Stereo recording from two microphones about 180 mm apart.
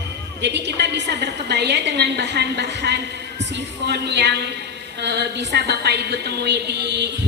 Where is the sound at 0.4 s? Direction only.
75° right (ahead or behind).